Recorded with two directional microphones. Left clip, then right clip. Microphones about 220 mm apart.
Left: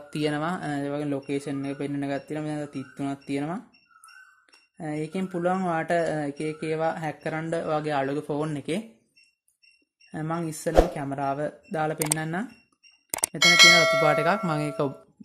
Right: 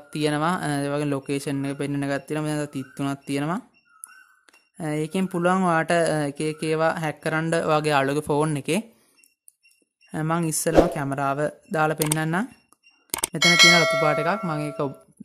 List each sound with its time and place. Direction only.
0.1 s speech: 20° right (ahead or behind); by 3.6 s 35° right (ahead or behind)
4.7 s speech: 30° right (ahead or behind)
10.1 s speech: 35° right (ahead or behind)
13.4 s speech: centre (ahead or behind)
14.0 s speech: 15° right (ahead or behind)